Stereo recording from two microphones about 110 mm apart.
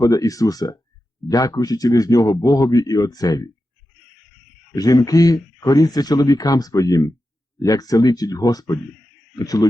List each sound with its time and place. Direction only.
0.0 s speech: 30° left (ahead or behind)
4.7 s speech: 35° left (ahead or behind)